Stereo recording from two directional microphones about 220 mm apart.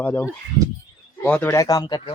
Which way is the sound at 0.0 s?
5° left (ahead or behind).